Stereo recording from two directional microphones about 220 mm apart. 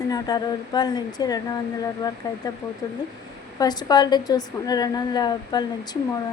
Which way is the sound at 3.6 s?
20° left (ahead or behind).